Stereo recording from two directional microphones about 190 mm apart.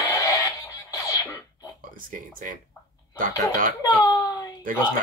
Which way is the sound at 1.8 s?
45° right (ahead or behind).